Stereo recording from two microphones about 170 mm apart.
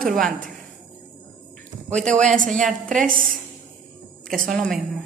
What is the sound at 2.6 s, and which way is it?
Speech, 50° right (ahead or behind).